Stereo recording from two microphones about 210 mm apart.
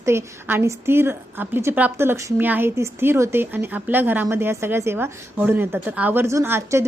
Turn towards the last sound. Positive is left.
turn(degrees=-10)  # may be behind; listen again after turning